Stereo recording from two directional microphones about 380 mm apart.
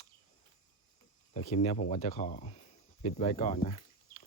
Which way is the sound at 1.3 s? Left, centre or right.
Centre.